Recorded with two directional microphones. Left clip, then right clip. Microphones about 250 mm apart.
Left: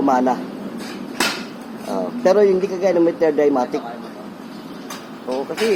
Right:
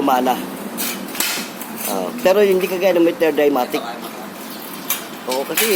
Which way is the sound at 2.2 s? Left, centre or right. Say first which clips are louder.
Even; centre.